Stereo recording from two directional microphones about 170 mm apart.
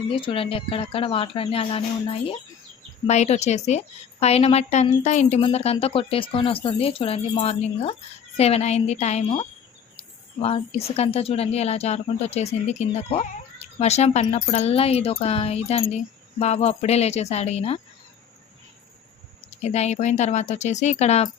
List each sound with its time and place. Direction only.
0.2 s a woman's voice: 30° left (ahead or behind)
19.6 s speech: 40° left (ahead or behind)